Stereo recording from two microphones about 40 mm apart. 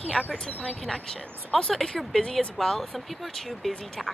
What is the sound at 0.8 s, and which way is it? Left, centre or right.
Speech, centre.